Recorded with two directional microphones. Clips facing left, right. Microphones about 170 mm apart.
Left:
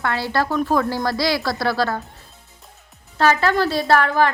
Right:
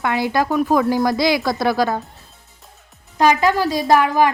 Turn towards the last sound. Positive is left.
turn(degrees=-15)  # may be behind; listen again after turning